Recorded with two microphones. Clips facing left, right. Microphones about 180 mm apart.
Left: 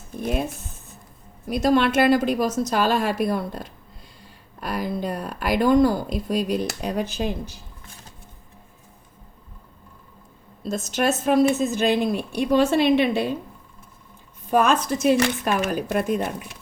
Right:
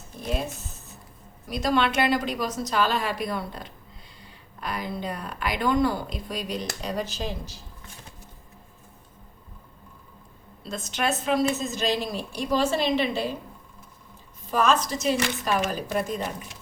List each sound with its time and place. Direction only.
0.2 s a woman's voice: 55° left (ahead or behind)
1.6 s a woman's voice: 45° left (ahead or behind)
10.6 s a woman's voice: 45° left (ahead or behind); by 13.3 s 60° left (ahead or behind)
14.5 s a woman's voice: 55° left (ahead or behind)